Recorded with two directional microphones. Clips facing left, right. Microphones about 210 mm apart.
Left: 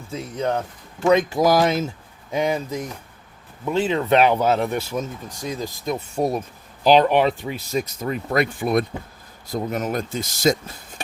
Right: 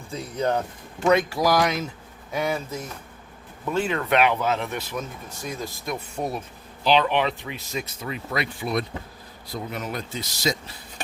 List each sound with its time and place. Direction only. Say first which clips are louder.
0.1 s speech: left 1 dB; centre (ahead or behind)
1.0 s speech: left 3 dB; 20° left (ahead or behind)
3.7 s speech: left 4 dB; 25° left (ahead or behind)
5.5 s speech: left 5 dB; 20° left (ahead or behind)
6.1 s speech: left 7 dB; 40° left (ahead or behind)